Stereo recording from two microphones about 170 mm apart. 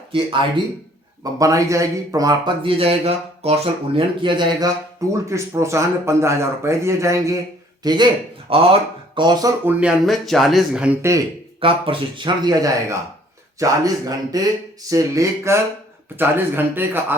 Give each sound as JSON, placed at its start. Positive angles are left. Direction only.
{"t": 1.2, "sound": "a man's voice", "side_deg": -20}
{"t": 9.6, "sound": "speech", "side_deg": -5}
{"t": 11.6, "sound": "a man's voice", "side_deg": -30}